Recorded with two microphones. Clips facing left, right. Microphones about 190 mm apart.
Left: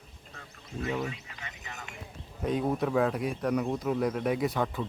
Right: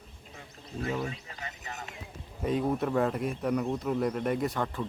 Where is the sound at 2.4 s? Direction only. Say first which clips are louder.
Even; centre (ahead or behind).